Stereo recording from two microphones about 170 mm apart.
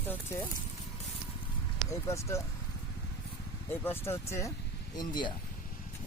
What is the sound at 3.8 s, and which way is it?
Speech, 15° left (ahead or behind).